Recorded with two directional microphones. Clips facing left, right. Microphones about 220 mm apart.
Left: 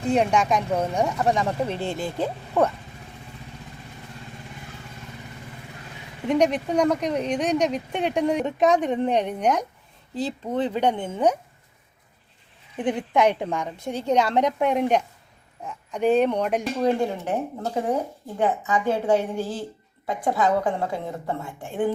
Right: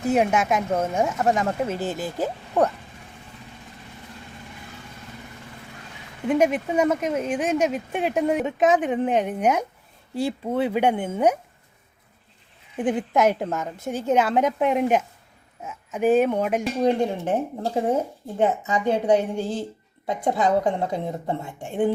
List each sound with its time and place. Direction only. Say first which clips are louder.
0.0 s speech: even; 5° right (ahead or behind)
6.2 s a woman's voice: even; 5° right (ahead or behind)
12.7 s speech: right 1 dB; 5° right (ahead or behind)
16.8 s a woman's voice: right 2 dB; 20° right (ahead or behind)